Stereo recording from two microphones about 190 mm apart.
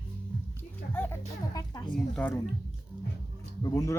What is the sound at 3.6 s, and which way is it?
Speech, 15° left (ahead or behind).